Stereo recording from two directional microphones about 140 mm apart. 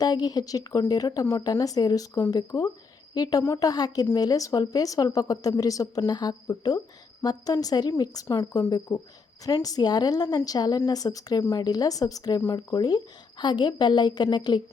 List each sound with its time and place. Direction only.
0.0 s a woman's voice: 30° left (ahead or behind)